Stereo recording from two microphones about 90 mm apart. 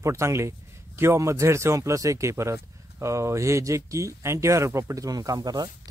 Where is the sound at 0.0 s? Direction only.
35° right (ahead or behind).